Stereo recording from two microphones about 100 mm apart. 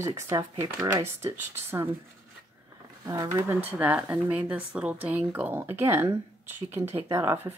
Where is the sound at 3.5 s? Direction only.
20° right (ahead or behind).